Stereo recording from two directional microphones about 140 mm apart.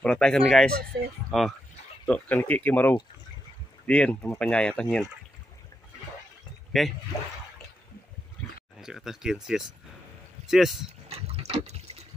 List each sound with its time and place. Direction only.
0.0 s speech: 5° left (ahead or behind)
6.7 s speech: centre (ahead or behind)
8.7 s speech: 5° right (ahead or behind)
11.1 s a sound: 50° right (ahead or behind)